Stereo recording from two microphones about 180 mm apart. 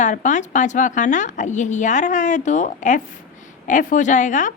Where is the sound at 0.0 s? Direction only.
45° left (ahead or behind).